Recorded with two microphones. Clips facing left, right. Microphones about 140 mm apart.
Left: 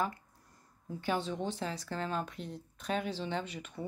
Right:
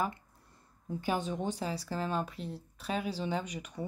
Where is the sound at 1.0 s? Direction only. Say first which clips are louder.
Right 1 dB; 15° right (ahead or behind).